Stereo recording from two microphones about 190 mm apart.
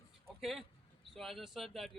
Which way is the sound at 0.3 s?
Centre (ahead or behind).